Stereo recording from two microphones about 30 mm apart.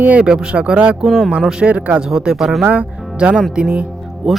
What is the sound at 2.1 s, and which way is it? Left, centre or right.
Speech, right.